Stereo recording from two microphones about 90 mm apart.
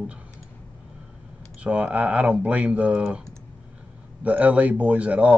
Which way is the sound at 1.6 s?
15° right (ahead or behind).